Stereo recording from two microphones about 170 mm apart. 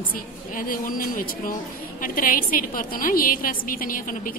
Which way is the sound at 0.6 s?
55° left (ahead or behind).